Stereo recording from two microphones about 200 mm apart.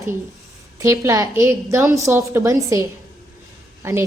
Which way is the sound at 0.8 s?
15° right (ahead or behind).